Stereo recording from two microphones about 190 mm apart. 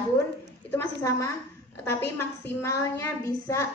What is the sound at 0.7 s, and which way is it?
A woman's voice, 15° left (ahead or behind).